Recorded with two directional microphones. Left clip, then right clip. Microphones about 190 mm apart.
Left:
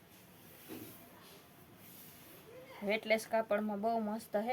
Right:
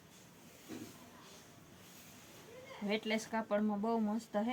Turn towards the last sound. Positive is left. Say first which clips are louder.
# left 1 dB
turn(degrees=60)  # may be behind; listen again after turning